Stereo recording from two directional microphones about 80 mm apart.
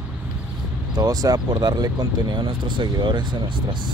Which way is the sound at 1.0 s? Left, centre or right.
Right.